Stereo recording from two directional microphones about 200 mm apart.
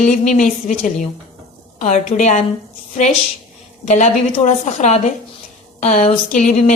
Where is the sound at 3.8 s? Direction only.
35° left (ahead or behind).